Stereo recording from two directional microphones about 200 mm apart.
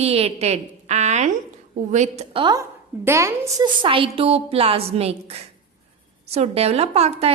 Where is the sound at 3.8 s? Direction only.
25° right (ahead or behind).